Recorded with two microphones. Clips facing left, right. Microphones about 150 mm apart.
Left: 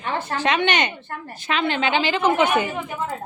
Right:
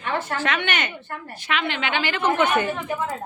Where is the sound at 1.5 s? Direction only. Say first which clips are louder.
Left 4 dB; 35° left (ahead or behind).